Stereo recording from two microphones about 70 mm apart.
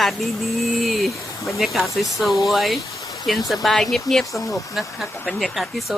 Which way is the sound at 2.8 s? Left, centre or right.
Left.